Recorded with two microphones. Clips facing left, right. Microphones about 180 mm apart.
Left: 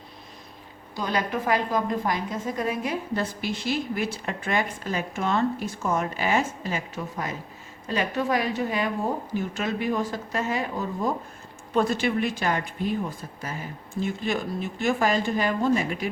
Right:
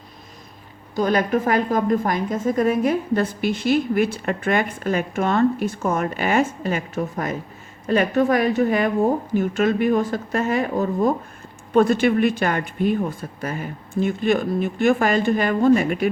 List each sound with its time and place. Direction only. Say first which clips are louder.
0.9 s a woman's voice: right 8 dB; 50° right (ahead or behind)